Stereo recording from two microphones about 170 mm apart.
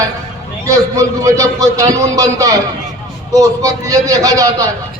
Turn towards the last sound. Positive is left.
turn(degrees=-20)  # may be behind; listen again after turning